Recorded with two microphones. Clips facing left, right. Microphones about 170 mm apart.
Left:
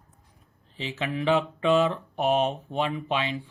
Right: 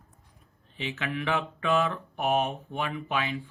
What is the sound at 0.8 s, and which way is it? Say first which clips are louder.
Speech: left 2 dB; 30° left (ahead or behind).